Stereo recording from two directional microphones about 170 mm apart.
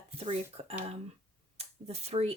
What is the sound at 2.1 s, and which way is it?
Speech, 40° right (ahead or behind).